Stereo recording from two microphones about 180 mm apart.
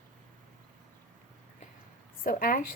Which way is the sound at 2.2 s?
50° left (ahead or behind).